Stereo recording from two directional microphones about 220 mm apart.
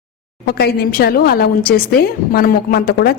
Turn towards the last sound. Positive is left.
turn(degrees=45)  # may be behind; listen again after turning